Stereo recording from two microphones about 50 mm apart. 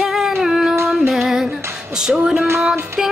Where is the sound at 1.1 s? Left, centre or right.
Centre.